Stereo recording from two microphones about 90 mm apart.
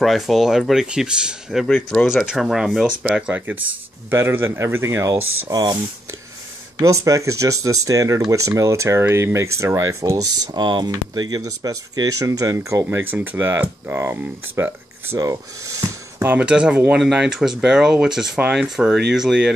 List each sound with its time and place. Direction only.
0.0 s speech: centre (ahead or behind)
4.1 s speech: 25° right (ahead or behind)
5.5 s speech: 50° right (ahead or behind)
6.8 s speech: 35° right (ahead or behind)
10.5 s speech: 55° right (ahead or behind); by 15.1 s 25° right (ahead or behind)
15.1 s speech: 35° right (ahead or behind)
16.3 s speech: 10° right (ahead or behind)